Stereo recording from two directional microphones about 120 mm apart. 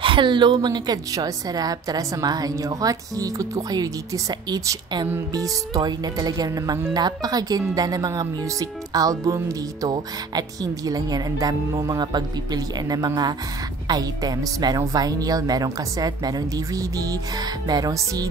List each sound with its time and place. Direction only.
0.0 s speech: 40° right (ahead or behind)